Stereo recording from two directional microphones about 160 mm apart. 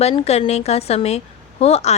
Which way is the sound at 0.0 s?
40° left (ahead or behind).